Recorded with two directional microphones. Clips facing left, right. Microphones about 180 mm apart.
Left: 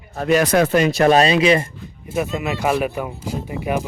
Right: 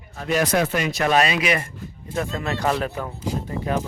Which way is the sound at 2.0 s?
10° left (ahead or behind).